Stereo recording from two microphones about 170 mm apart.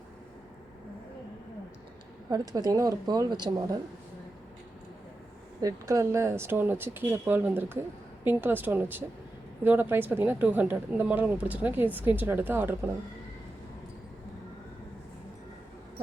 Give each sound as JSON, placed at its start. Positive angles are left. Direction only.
{"t": 2.3, "sound": "speech", "side_deg": -20}
{"t": 5.5, "sound": "speech", "side_deg": -20}